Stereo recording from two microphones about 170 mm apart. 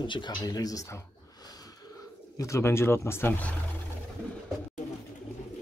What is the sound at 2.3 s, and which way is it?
Speech, 15° left (ahead or behind).